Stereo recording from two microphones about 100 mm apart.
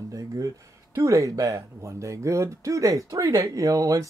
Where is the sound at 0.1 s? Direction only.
35° right (ahead or behind).